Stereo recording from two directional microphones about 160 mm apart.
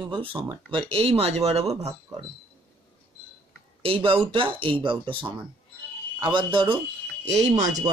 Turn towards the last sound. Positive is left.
turn(degrees=-45)  # may be behind; listen again after turning